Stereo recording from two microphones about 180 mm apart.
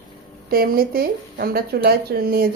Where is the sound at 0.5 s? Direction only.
55° right (ahead or behind).